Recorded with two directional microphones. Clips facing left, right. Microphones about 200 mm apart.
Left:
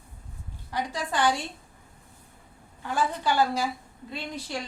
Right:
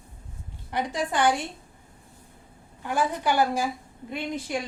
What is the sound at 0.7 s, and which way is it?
Speech, 20° right (ahead or behind).